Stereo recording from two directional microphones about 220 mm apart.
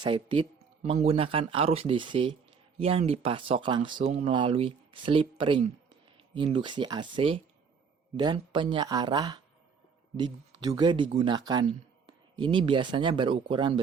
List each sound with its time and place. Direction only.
0.0 s speech: 20° right (ahead or behind)